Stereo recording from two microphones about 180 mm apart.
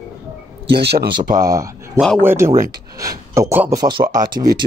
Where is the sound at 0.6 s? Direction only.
65° right (ahead or behind).